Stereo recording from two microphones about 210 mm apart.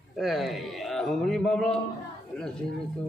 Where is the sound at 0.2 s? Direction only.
Centre (ahead or behind).